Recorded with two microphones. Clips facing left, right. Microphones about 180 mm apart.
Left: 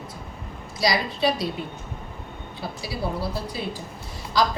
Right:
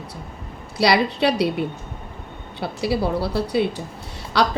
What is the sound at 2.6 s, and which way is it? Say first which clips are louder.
Speech: right 8 dB; 65° right (ahead or behind).